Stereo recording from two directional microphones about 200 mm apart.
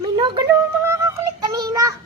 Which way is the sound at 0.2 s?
25° right (ahead or behind).